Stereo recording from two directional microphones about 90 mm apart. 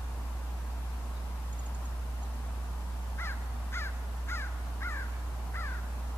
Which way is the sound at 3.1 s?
25° left (ahead or behind).